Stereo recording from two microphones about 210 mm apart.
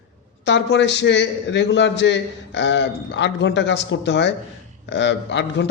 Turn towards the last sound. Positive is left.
turn(degrees=60)  # may be behind; listen again after turning